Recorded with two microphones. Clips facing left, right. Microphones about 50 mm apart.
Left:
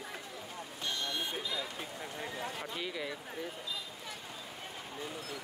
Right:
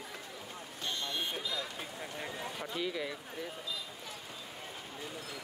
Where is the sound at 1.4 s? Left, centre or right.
Centre.